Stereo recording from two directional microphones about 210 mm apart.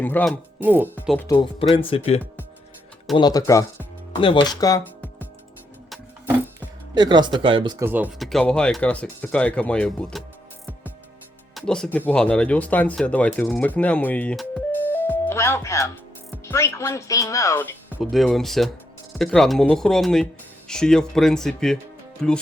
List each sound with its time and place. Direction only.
0.0 s speech: 10° left (ahead or behind)
0.6 s speech: 10° right (ahead or behind)
0.9 s speech: 5° left (ahead or behind)
1.3 s speech: 25° left (ahead or behind)
3.2 s speech: 20° left (ahead or behind)
6.9 s speech: 20° right (ahead or behind)
7.9 s speech: 10° right (ahead or behind)
11.5 s speech: 5° left (ahead or behind)